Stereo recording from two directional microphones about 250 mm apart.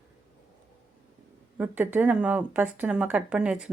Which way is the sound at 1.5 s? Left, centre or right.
Centre.